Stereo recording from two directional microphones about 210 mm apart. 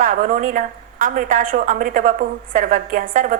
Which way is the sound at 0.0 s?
40° right (ahead or behind).